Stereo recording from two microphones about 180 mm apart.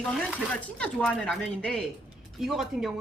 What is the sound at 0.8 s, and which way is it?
A woman's voice, 5° left (ahead or behind).